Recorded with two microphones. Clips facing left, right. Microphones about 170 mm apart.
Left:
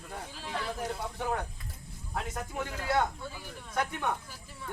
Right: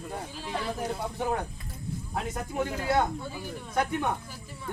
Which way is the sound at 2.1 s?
15° right (ahead or behind).